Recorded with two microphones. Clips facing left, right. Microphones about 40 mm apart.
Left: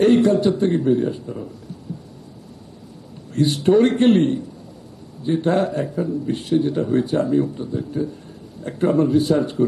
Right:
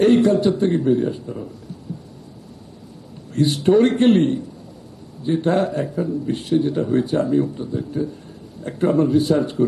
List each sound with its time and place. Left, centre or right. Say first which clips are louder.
0.0 s a man's voice: even; centre
3.3 s a man's voice: even; centre